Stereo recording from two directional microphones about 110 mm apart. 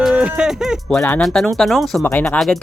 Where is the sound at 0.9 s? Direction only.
10° left (ahead or behind).